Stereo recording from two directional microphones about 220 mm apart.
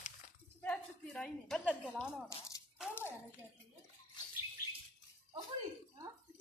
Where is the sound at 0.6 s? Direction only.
5° left (ahead or behind).